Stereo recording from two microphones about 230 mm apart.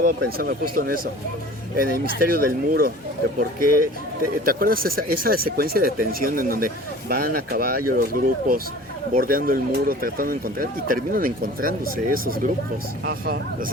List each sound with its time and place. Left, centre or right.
0.0 s speech: right